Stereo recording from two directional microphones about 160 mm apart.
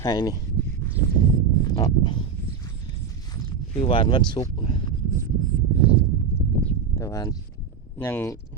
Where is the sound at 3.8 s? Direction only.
35° left (ahead or behind).